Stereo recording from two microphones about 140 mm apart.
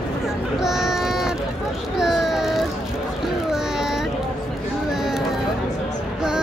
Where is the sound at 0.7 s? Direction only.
Centre (ahead or behind).